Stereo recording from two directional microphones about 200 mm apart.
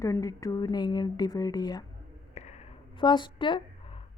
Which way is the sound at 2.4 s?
35° left (ahead or behind).